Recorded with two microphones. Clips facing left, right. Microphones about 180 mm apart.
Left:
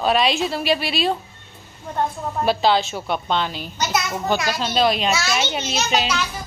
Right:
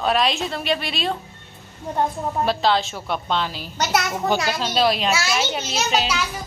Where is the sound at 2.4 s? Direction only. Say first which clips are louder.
Left 3 dB; 5° left (ahead or behind).